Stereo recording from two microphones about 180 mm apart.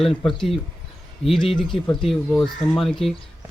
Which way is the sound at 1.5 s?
Centre (ahead or behind).